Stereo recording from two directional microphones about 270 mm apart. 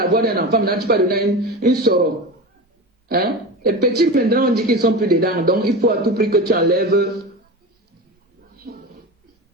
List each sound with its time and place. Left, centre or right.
0.0 s speech: right
3.1 s speech: right